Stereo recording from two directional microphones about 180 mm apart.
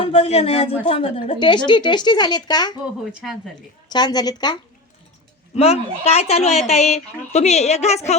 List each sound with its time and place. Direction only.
0.0 s a woman's voice: 30° left (ahead or behind)
3.9 s a woman's voice: 20° left (ahead or behind)
5.5 s a woman's voice: 35° left (ahead or behind)